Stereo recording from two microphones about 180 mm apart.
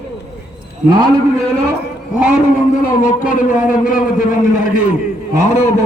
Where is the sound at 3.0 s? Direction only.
50° left (ahead or behind).